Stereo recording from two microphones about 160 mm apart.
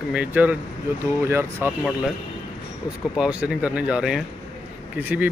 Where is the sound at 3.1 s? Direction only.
5° right (ahead or behind).